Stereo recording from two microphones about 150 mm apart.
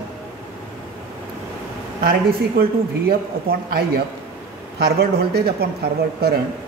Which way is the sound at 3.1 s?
85° right.